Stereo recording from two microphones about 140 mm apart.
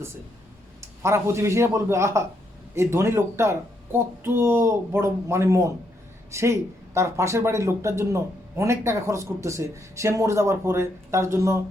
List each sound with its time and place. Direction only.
0.8 s speech: 20° right (ahead or behind)